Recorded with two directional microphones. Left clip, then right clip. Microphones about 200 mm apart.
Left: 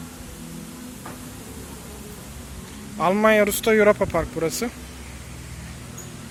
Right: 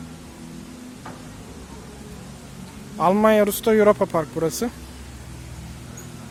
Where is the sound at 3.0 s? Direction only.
15° right (ahead or behind).